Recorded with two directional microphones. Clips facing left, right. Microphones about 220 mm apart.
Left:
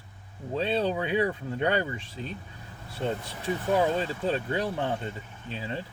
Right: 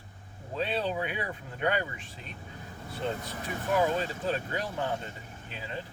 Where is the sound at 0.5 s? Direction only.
30° left (ahead or behind).